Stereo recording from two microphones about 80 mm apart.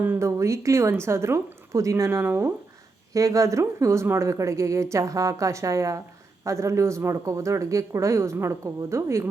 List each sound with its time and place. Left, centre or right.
0.2 s speech: right
3.1 s speech: right